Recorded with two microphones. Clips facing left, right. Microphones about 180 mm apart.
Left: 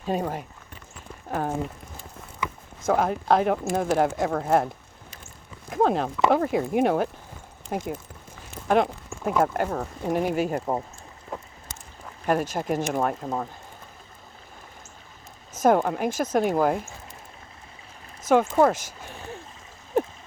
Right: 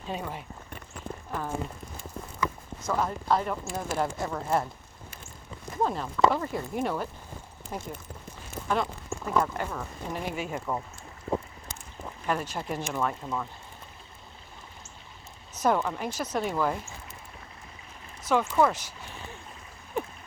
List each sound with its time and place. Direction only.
0.1 s speech: 45° left (ahead or behind)
2.8 s speech: 60° left (ahead or behind)
5.7 s speech: 70° left (ahead or behind)
8.6 s a sound: 60° left (ahead or behind)
9.4 s speech: 55° left (ahead or behind)
12.2 s speech: 45° left (ahead or behind)
15.5 s speech: 50° left (ahead or behind)
18.2 s speech: 50° left (ahead or behind)